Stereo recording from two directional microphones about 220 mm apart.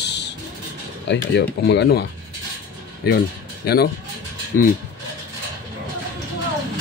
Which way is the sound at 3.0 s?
45° left (ahead or behind).